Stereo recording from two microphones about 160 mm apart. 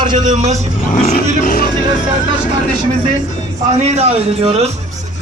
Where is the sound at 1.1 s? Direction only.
60° left (ahead or behind).